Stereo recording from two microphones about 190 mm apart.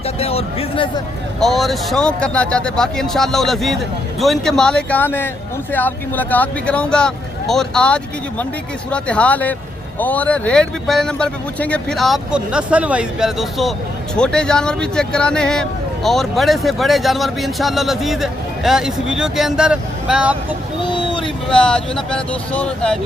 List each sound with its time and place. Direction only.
0.2 s speech: 30° left (ahead or behind)
1.4 s speech: centre (ahead or behind)
20.8 s speech: 25° left (ahead or behind)
21.5 s speech: 5° left (ahead or behind)